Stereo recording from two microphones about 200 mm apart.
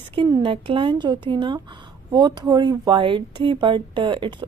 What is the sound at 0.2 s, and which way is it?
A woman's voice, 25° right (ahead or behind).